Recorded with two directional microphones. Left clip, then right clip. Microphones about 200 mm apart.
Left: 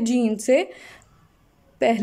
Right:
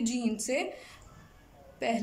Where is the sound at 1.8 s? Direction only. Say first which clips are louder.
Left 11 dB; 40° left (ahead or behind).